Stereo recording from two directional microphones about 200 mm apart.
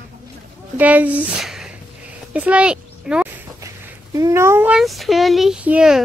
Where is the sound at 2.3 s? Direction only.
5° right (ahead or behind).